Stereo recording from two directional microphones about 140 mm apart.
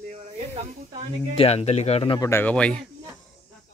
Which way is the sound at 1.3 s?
45° left (ahead or behind).